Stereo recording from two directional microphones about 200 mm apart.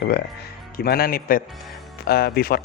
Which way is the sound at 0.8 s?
50° left (ahead or behind).